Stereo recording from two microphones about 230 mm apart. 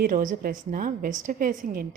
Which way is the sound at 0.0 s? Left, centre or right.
Right.